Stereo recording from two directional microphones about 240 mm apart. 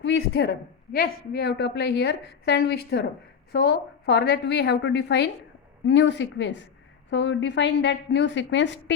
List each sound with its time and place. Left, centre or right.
0.0 s a woman's voice: left